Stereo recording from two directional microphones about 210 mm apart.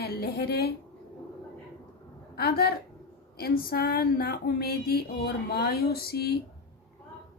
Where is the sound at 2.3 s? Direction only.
45° left (ahead or behind).